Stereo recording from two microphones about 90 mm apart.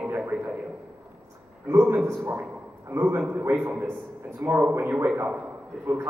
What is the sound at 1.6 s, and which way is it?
A man's voice, 20° right (ahead or behind).